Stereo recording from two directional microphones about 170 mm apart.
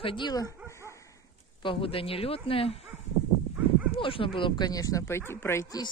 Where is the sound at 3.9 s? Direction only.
30° left (ahead or behind); by 5.6 s 15° left (ahead or behind).